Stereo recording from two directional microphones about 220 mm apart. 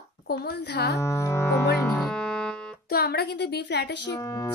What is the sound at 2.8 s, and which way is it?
Speech, 45° left (ahead or behind).